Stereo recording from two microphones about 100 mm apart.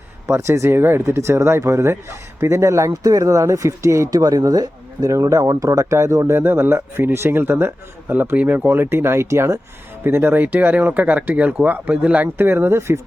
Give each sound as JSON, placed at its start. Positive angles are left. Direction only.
{"t": 0.3, "sound": "speech", "side_deg": -25}